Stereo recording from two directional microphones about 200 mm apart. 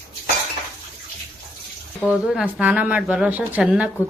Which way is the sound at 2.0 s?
5° right (ahead or behind).